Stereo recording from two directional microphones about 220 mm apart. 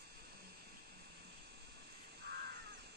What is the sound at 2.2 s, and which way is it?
Crow, 45° right (ahead or behind).